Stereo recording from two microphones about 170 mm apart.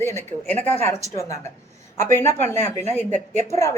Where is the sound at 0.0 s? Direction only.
15° left (ahead or behind).